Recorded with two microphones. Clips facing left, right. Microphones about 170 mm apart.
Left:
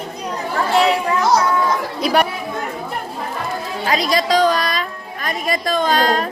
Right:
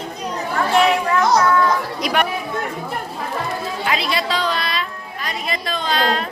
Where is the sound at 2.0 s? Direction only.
30° left (ahead or behind).